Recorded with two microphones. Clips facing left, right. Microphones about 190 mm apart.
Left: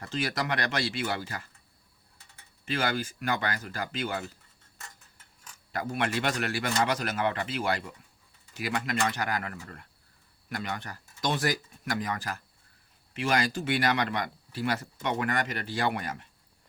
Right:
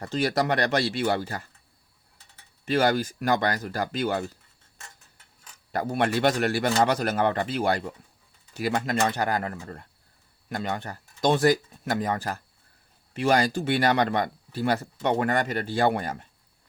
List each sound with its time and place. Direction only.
0.0 s speech: 35° right (ahead or behind)
2.6 s speech: 40° right (ahead or behind)
5.7 s speech: 35° right (ahead or behind)